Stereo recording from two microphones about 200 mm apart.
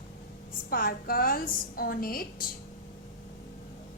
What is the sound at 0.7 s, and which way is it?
A woman's voice, 45° left (ahead or behind).